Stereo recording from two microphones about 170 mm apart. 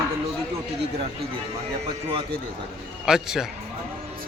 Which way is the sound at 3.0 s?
5° right (ahead or behind).